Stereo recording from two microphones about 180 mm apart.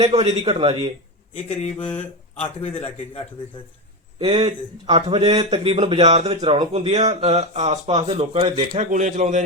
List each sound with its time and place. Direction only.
0.0 s speech: 35° right (ahead or behind)
1.5 s a man's voice: 35° left (ahead or behind)
4.2 s speech: 30° right (ahead or behind)
6.3 s speech: 25° right (ahead or behind)
6.7 s speech: 35° right (ahead or behind)
8.8 s a man's voice: 40° right (ahead or behind)